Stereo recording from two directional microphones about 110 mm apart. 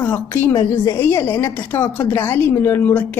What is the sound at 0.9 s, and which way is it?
A woman's voice, 20° left (ahead or behind).